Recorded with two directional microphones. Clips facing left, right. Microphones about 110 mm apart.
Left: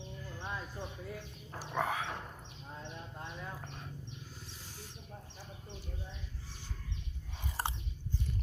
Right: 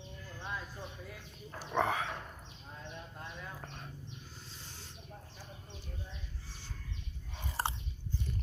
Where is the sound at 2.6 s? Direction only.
20° left (ahead or behind).